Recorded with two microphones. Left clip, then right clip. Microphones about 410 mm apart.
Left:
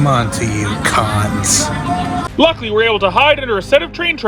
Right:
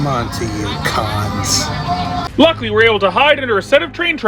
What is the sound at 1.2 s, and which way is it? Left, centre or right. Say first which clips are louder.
Music: left 1 dB; left.